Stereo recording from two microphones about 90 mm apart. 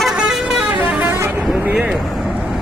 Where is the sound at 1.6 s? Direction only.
15° right (ahead or behind).